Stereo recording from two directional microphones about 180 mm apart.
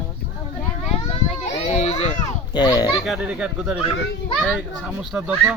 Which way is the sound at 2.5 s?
20° left (ahead or behind).